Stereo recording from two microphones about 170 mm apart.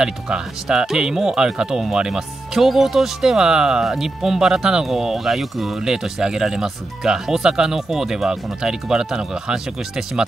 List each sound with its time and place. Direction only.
0.0 s speech: 5° right (ahead or behind)